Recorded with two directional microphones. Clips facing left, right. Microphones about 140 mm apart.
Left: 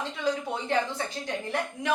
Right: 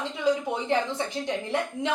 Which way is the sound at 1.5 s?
25° right (ahead or behind).